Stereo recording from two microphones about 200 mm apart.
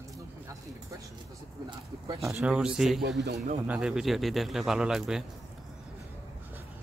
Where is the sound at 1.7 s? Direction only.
20° right (ahead or behind).